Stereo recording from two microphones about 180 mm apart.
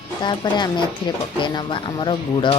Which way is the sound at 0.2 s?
25° left (ahead or behind).